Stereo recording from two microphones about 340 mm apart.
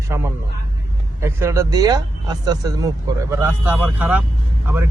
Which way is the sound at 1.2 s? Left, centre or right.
Centre.